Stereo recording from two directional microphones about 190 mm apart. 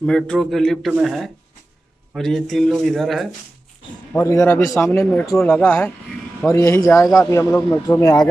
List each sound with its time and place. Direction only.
0.0 s a man's voice: 5° left (ahead or behind)
4.1 s a man's voice: 15° left (ahead or behind)